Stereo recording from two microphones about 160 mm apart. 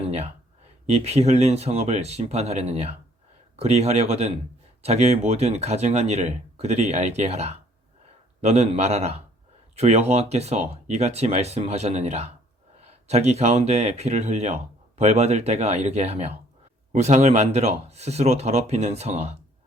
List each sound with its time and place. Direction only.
0.9 s speech: 40° right (ahead or behind)